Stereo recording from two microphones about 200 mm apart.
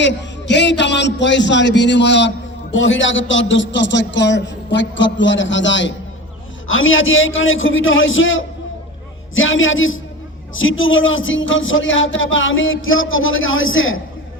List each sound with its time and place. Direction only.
0.0 s a man's voice: 60° left (ahead or behind)
6.7 s a man's voice: 80° left